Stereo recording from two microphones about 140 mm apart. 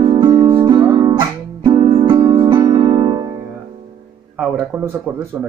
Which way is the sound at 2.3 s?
30° right (ahead or behind).